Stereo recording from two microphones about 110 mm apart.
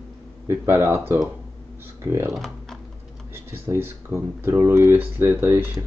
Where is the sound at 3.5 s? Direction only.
20° right (ahead or behind).